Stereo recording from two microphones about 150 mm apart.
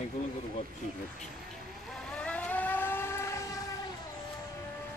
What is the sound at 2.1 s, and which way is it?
Vehicle, 5° left (ahead or behind).